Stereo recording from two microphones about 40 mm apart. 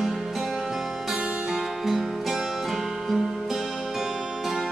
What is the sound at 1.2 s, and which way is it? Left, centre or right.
Music, right.